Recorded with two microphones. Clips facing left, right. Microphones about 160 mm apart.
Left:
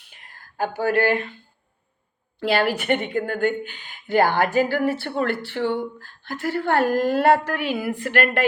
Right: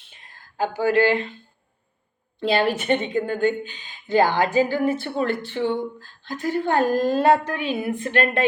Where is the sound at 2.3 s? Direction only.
20° right (ahead or behind).